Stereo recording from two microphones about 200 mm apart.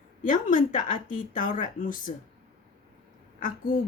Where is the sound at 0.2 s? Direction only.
40° left (ahead or behind).